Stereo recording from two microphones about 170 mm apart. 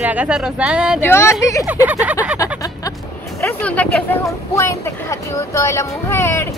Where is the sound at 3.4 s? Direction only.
10° left (ahead or behind).